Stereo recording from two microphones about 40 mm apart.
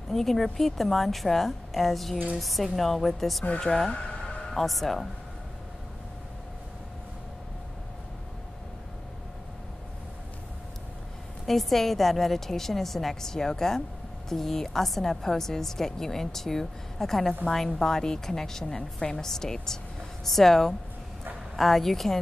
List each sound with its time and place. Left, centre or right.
0.1 s a woman's voice: centre
3.7 s speech: left
4.5 s speech: centre
11.4 s a woman's voice: centre